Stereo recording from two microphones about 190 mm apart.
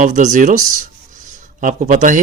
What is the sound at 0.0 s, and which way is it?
Speech, 40° right (ahead or behind).